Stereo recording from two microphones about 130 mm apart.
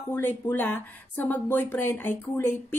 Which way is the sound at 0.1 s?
15° left (ahead or behind).